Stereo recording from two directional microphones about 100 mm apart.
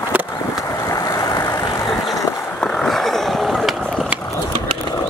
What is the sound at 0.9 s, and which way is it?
Vehicle, 35° left (ahead or behind).